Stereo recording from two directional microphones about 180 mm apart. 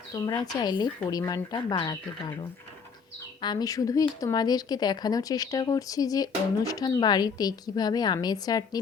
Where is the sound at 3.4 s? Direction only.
20° left (ahead or behind).